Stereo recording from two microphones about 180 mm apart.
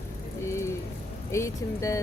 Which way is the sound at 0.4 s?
15° left (ahead or behind).